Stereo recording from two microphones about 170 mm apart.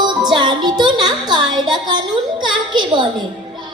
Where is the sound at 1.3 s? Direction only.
25° right (ahead or behind).